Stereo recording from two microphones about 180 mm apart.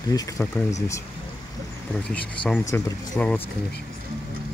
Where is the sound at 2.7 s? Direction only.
20° left (ahead or behind).